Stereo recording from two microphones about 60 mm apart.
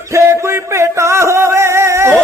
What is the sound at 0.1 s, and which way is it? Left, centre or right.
Music, right.